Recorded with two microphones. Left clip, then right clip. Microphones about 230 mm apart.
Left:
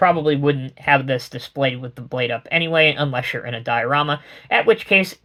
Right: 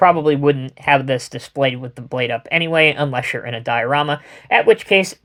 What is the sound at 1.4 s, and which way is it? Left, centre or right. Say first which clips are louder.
Speech: right 3 dB; right.